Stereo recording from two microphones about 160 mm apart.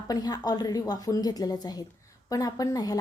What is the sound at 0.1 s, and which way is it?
A woman's voice, 25° left (ahead or behind).